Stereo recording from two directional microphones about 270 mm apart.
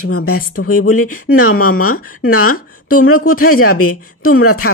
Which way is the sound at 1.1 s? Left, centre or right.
Left.